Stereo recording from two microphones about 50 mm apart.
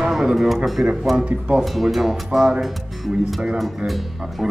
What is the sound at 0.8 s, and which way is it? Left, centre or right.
Speech, centre.